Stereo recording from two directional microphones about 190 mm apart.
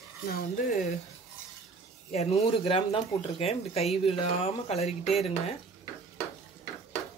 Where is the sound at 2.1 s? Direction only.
35° left (ahead or behind).